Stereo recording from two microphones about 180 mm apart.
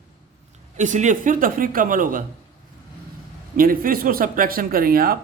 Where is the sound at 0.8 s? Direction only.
45° right (ahead or behind).